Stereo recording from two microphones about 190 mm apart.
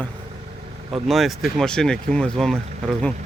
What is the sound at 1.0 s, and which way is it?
Speech, centre (ahead or behind).